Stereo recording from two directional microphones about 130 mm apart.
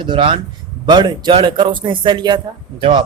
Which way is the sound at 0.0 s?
40° right (ahead or behind).